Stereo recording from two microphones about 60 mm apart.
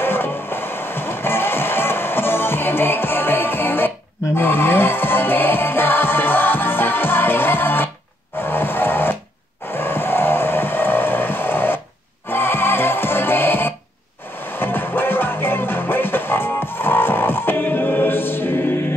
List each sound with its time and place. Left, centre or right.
0.0 s music: left
9.7 s vehicle: left
12.3 s music: left